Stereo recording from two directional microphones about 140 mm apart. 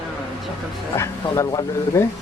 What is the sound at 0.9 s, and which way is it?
Speech, 20° left (ahead or behind).